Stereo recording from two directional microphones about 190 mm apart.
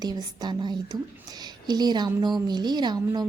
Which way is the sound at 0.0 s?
20° right (ahead or behind).